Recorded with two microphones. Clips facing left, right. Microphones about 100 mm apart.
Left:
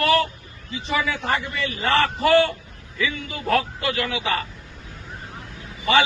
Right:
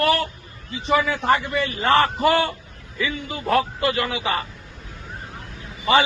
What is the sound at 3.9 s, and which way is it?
Speech, 30° right (ahead or behind).